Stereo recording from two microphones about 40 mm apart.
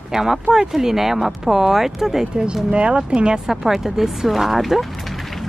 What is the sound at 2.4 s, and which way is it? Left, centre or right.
Speech, right.